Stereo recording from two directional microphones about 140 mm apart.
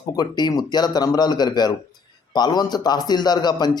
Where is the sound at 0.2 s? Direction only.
30° left (ahead or behind).